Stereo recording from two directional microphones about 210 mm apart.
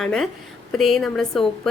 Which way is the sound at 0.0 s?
Centre (ahead or behind).